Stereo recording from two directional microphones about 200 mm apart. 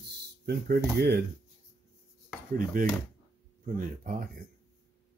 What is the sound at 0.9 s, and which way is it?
Speech, 55° right (ahead or behind).